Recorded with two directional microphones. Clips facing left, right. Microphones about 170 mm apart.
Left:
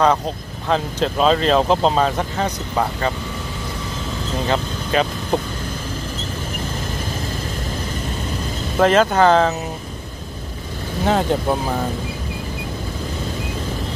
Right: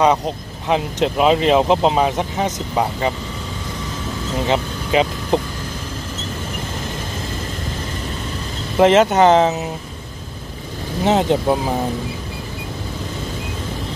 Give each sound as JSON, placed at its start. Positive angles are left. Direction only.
{"t": 0.7, "sound": "speech", "side_deg": -15}
{"t": 4.5, "sound": "speech", "side_deg": -20}
{"t": 8.7, "sound": "speech", "side_deg": -20}
{"t": 11.1, "sound": "speech", "side_deg": -20}